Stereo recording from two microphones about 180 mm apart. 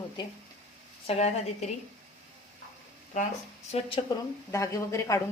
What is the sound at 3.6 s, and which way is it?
Speech, 35° left (ahead or behind).